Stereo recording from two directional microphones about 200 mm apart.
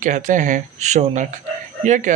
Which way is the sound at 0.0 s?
40° right (ahead or behind).